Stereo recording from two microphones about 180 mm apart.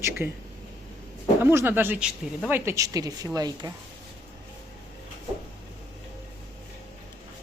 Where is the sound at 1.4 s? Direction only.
15° right (ahead or behind).